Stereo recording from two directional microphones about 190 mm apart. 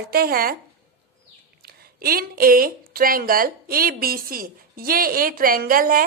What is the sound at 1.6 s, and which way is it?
A woman's voice, 55° right (ahead or behind).